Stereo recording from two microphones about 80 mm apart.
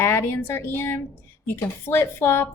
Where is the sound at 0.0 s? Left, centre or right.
Left.